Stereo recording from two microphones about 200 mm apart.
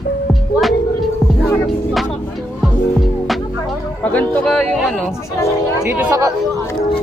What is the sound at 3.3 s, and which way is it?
Music, centre (ahead or behind).